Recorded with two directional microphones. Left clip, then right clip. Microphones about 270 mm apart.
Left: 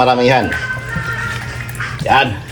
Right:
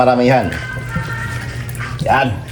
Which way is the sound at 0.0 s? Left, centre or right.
Left.